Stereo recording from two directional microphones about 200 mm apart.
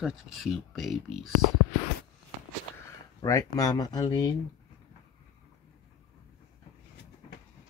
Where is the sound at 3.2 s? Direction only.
15° left (ahead or behind).